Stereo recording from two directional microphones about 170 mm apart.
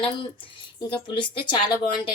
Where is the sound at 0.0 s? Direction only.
30° left (ahead or behind).